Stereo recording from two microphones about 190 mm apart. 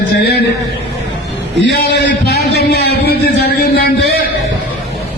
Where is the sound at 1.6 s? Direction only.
60° left (ahead or behind).